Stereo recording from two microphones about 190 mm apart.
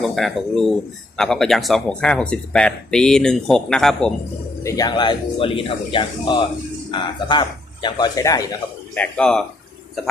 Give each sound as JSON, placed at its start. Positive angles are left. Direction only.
{"t": 0.0, "sound": "speech", "side_deg": 0}
{"t": 4.6, "sound": "speech", "side_deg": 20}
{"t": 9.0, "sound": "speech", "side_deg": 5}